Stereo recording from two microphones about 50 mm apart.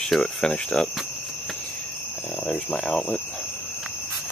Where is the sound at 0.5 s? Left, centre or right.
Centre.